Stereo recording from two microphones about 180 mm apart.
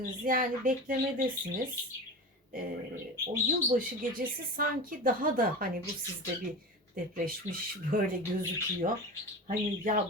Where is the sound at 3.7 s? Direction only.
50° right (ahead or behind).